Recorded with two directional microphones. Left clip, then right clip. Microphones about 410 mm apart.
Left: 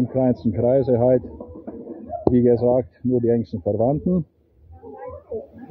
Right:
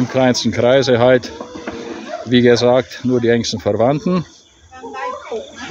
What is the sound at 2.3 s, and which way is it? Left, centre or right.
Speech, centre.